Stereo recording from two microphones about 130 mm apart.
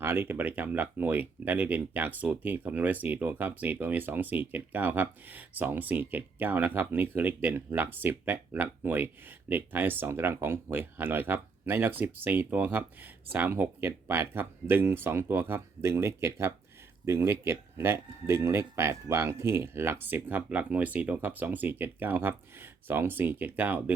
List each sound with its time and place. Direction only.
0.0 s speech: 15° right (ahead or behind)